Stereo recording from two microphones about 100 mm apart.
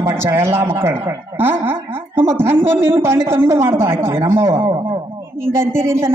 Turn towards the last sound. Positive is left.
turn(degrees=-25)  # may be behind; listen again after turning